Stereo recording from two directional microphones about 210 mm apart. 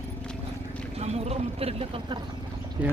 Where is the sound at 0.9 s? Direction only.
30° right (ahead or behind).